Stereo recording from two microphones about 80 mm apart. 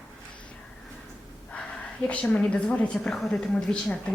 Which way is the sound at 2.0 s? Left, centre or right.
Centre.